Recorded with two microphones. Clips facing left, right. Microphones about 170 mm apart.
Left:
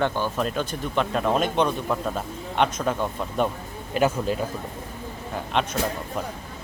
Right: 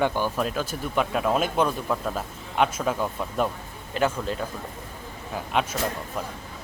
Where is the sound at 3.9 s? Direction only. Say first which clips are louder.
Left 3 dB; 10° left (ahead or behind).